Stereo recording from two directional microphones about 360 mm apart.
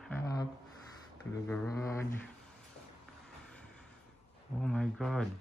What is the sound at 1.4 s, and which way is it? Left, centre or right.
Speech, centre.